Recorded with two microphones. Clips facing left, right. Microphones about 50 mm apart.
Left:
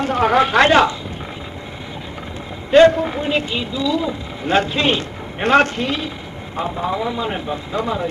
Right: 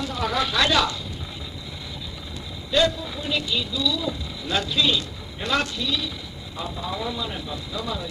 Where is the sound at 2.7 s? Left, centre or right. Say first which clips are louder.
Left 11 dB; left.